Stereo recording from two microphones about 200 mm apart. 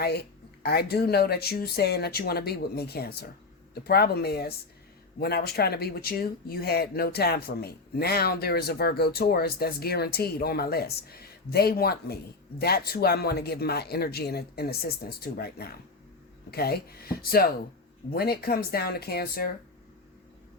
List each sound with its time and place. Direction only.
0.0 s speech: 55° left (ahead or behind)